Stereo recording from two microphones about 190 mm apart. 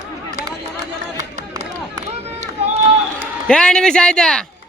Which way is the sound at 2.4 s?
35° right (ahead or behind).